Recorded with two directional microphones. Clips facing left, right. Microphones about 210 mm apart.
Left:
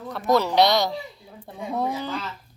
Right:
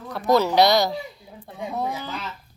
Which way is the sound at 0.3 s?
Centre (ahead or behind).